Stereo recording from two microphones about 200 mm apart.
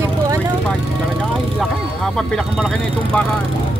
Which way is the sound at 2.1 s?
5° left (ahead or behind).